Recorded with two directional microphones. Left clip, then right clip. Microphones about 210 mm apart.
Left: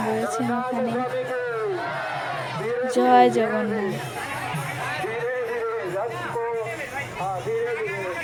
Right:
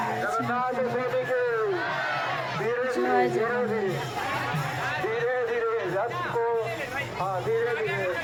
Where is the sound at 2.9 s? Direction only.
30° left (ahead or behind).